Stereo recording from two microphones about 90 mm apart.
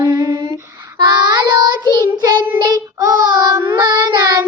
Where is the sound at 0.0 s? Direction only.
35° right (ahead or behind).